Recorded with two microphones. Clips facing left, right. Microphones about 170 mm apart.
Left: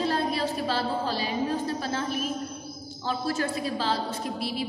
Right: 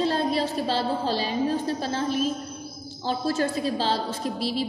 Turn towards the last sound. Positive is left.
turn(degrees=-30)  # may be behind; listen again after turning